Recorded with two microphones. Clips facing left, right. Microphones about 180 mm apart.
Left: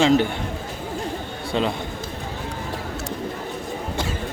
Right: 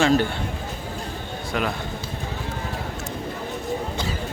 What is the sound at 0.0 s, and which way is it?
Speech, 20° left (ahead or behind).